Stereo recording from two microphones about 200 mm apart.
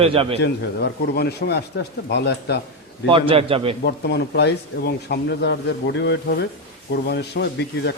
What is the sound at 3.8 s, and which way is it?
Speech, 55° left (ahead or behind).